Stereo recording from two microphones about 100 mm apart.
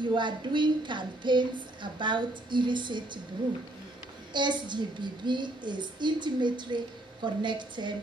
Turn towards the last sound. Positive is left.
turn(degrees=-50)  # may be behind; listen again after turning